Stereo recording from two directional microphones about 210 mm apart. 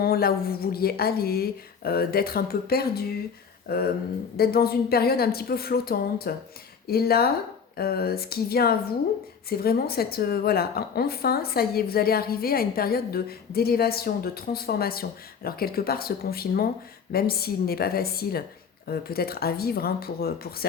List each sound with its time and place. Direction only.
0.0 s a woman's voice: 45° left (ahead or behind)